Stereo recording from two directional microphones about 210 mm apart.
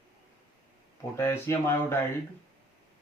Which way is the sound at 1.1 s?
10° left (ahead or behind).